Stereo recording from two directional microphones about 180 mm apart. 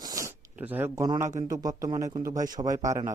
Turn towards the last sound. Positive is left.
turn(degrees=-20)  # may be behind; listen again after turning